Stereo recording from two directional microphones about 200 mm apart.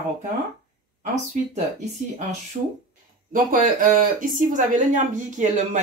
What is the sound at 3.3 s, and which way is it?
Speech, 40° right (ahead or behind).